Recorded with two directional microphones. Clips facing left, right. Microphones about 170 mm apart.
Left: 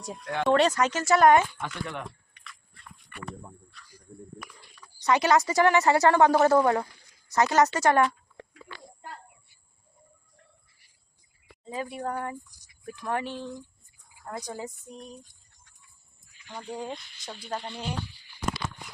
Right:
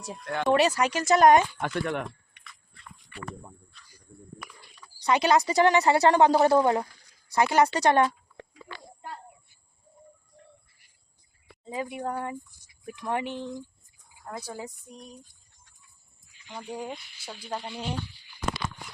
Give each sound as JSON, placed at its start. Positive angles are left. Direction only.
{"t": 0.0, "sound": "a sound", "side_deg": 0}
{"t": 0.4, "sound": "speech", "side_deg": -10}
{"t": 1.5, "sound": "speech", "side_deg": -55}
{"t": 3.1, "sound": "speech", "side_deg": 55}
{"t": 5.1, "sound": "speech", "side_deg": -15}
{"t": 5.4, "sound": "a woman's voice", "side_deg": -35}
{"t": 5.6, "sound": "speech", "side_deg": -20}
{"t": 7.8, "sound": "a woman's voice", "side_deg": -30}
{"t": 11.6, "sound": "speech", "side_deg": -20}
{"t": 14.5, "sound": "a sound", "side_deg": 0}
{"t": 16.5, "sound": "speech", "side_deg": -10}